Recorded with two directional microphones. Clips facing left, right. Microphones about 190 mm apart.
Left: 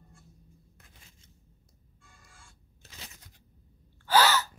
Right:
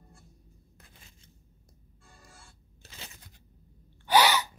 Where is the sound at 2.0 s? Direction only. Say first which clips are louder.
Right 4 dB; 35° right (ahead or behind).